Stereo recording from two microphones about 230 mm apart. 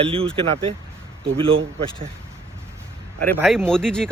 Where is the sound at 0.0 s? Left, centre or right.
Right.